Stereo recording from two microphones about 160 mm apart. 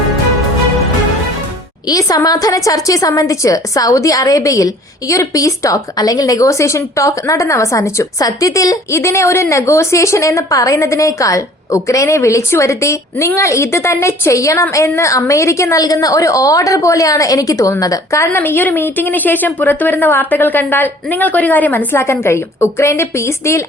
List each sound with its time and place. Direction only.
1.9 s a woman's voice: 20° left (ahead or behind)